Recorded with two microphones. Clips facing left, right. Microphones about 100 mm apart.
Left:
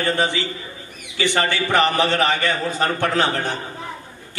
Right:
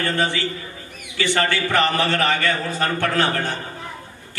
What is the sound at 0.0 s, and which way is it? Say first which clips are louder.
A man's voice: left 1 dB; 20° left (ahead or behind).